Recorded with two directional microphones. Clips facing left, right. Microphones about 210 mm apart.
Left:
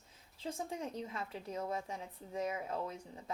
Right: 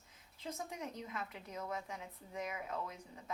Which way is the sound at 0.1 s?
30° left (ahead or behind).